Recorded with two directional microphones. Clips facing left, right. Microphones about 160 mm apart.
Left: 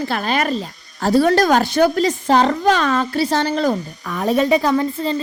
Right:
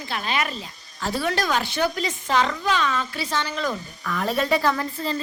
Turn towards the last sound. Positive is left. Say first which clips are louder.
# left 6 dB
turn(degrees=25)  # may be behind; listen again after turning